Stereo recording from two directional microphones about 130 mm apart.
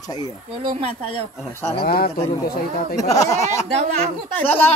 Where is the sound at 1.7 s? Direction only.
50° left (ahead or behind).